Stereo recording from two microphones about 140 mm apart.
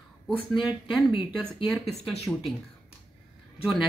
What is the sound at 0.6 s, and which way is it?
Speech, 35° left (ahead or behind).